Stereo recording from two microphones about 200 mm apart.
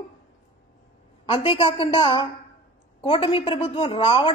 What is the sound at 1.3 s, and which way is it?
A man's voice, 25° left (ahead or behind).